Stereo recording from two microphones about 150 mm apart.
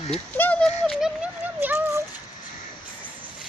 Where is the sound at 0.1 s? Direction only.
10° left (ahead or behind); by 2.0 s 10° right (ahead or behind).